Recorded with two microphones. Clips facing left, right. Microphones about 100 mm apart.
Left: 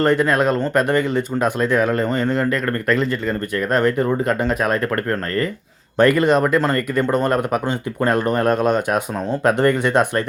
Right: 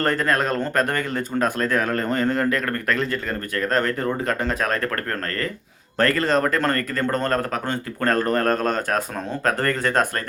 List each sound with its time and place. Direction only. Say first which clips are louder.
0.0 s speech: left 5 dB; 5° left (ahead or behind)
6.0 s speech: left 5 dB; 10° left (ahead or behind)